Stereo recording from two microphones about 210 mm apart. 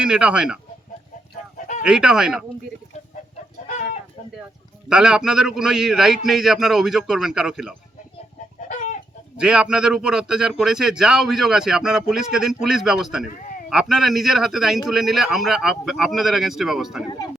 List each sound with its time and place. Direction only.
0.0 s a man's voice: 5° right (ahead or behind)
1.5 s chicken: 35° left (ahead or behind)
1.8 s a man's voice: 5° right (ahead or behind)
4.9 s a man's voice: 5° right (ahead or behind)
8.7 s chicken: 35° left (ahead or behind)
9.4 s a man's voice: 5° right (ahead or behind)
13.2 s speech: 40° left (ahead or behind)
13.7 s a man's voice: centre (ahead or behind)